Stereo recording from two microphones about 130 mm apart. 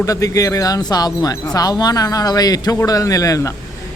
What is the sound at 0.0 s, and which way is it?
Speech, 25° left (ahead or behind).